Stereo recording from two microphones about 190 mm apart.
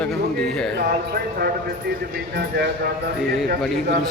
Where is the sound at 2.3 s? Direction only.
55° right (ahead or behind).